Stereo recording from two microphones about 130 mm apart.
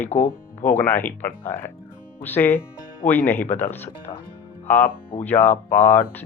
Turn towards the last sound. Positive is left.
turn(degrees=15)  # may be behind; listen again after turning